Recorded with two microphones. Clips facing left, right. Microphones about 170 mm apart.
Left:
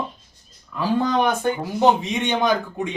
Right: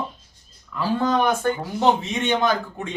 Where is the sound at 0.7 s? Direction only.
15° left (ahead or behind).